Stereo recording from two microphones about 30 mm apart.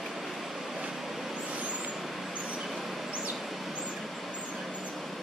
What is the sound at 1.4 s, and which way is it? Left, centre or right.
Vehicle, right.